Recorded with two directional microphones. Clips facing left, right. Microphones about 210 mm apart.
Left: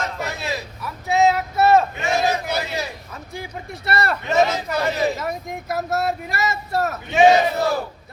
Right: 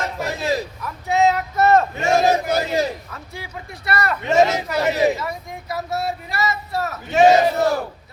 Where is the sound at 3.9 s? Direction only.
30° left (ahead or behind).